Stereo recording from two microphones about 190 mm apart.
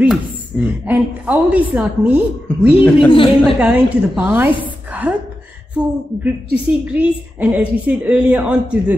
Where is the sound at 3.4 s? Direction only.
5° right (ahead or behind).